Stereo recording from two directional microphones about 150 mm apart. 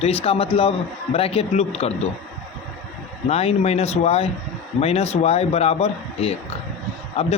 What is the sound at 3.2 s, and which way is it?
Speech, 45° left (ahead or behind).